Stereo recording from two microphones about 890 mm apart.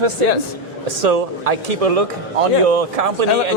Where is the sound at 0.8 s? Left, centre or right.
Right.